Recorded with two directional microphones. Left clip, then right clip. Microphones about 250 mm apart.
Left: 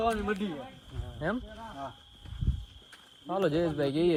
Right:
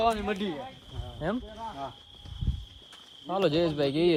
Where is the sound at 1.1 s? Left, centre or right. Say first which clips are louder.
Right 1 dB; centre.